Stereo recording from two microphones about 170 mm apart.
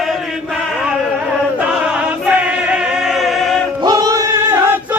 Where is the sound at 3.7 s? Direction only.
25° right (ahead or behind).